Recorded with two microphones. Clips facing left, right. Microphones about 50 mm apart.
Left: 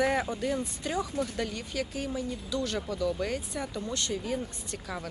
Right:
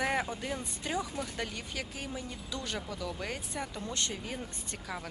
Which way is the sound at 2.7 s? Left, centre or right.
Centre.